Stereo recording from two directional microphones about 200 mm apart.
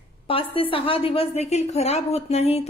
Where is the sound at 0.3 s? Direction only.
25° left (ahead or behind).